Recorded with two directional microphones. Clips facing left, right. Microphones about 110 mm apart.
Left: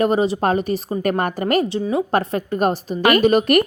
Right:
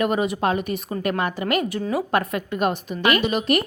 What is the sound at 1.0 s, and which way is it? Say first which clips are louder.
A woman's voice: left 2 dB; 45° left (ahead or behind).